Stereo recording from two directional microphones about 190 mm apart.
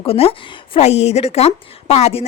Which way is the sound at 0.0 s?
30° left (ahead or behind).